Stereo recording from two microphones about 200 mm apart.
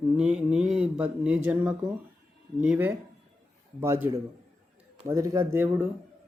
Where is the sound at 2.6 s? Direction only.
10° right (ahead or behind).